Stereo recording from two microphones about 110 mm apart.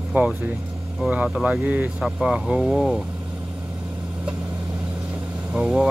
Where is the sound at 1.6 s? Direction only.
20° right (ahead or behind).